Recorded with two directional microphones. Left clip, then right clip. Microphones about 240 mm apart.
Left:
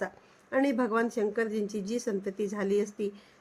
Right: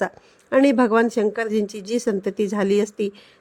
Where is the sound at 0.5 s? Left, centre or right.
Right.